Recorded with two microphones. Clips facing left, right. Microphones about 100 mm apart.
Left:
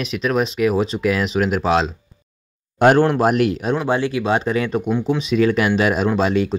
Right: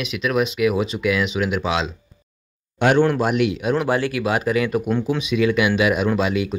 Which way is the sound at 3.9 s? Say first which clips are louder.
Left 2 dB; 25° left (ahead or behind).